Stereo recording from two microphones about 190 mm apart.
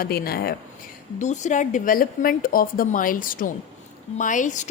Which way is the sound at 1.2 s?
40° left (ahead or behind).